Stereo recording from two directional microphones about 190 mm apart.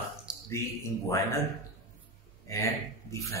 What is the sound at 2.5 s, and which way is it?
Speech, 15° left (ahead or behind).